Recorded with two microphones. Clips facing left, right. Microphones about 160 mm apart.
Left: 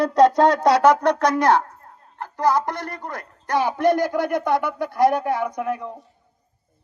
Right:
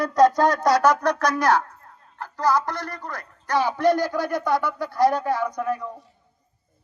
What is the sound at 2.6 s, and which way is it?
Speech, 50° left (ahead or behind).